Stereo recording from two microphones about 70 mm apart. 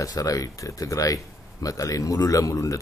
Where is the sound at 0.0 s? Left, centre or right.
Left.